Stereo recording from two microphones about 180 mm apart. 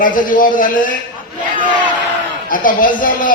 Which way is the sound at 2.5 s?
50° left (ahead or behind).